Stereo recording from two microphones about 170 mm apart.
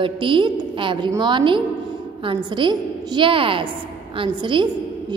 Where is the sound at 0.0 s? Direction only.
30° right (ahead or behind).